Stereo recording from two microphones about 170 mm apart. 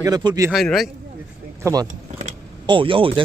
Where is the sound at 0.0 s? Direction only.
25° right (ahead or behind).